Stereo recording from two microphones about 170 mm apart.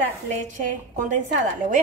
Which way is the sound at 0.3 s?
45° right (ahead or behind).